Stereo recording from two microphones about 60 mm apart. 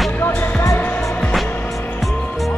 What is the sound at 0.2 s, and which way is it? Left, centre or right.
Music, left.